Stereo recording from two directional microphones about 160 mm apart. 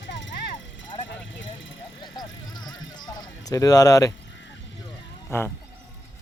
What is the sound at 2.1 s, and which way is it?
Music, 25° left (ahead or behind).